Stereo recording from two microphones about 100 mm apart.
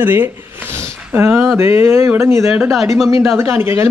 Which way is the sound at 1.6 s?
25° right (ahead or behind).